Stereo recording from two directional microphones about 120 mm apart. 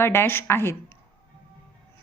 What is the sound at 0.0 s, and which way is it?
Speech, 20° left (ahead or behind).